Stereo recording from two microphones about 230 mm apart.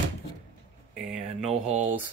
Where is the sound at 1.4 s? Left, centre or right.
Right.